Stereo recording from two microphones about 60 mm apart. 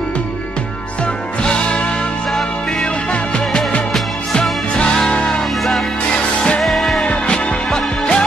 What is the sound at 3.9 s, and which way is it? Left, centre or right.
Music, centre.